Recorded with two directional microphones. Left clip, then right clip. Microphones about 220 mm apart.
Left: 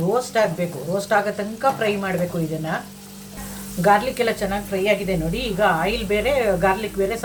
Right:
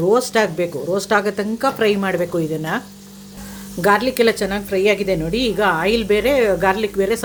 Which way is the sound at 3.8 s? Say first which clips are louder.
Right 2 dB; 50° right (ahead or behind).